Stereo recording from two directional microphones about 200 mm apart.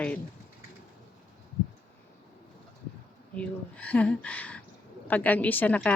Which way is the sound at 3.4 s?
5° left (ahead or behind).